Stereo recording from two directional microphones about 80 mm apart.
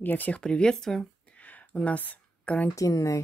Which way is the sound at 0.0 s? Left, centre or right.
Left.